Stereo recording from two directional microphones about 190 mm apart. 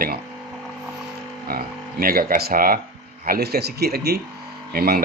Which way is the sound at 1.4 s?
50° right (ahead or behind).